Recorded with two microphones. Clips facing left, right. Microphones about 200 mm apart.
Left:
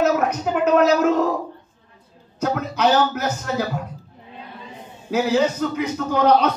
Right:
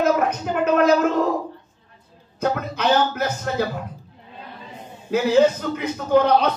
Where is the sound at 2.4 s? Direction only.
55° right (ahead or behind).